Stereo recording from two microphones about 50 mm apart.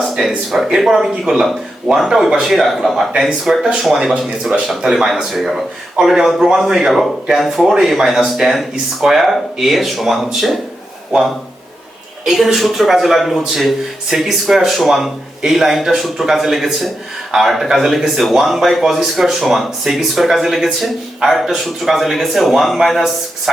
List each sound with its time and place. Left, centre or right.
0.2 s speech: centre
12.2 s speech: centre